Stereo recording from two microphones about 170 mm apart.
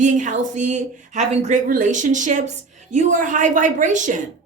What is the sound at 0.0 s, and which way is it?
Speech, 45° right (ahead or behind).